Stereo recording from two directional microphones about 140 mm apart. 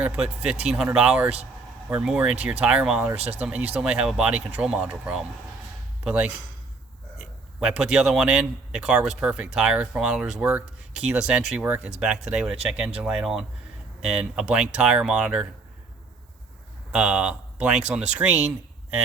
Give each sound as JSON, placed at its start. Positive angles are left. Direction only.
{"t": 0.0, "sound": "speech", "side_deg": -10}
{"t": 3.2, "sound": "speech", "side_deg": -50}
{"t": 3.4, "sound": "a man's voice", "side_deg": -10}
{"t": 16.9, "sound": "speech", "side_deg": -5}